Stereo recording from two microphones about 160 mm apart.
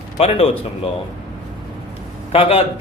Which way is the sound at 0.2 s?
40° left (ahead or behind).